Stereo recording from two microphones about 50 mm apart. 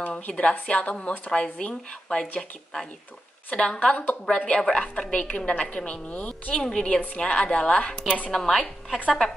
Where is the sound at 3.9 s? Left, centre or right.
Left.